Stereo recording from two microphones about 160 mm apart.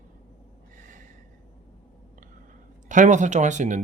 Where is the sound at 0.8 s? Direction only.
55° right (ahead or behind).